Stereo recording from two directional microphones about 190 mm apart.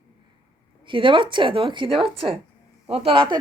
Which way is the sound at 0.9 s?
25° right (ahead or behind).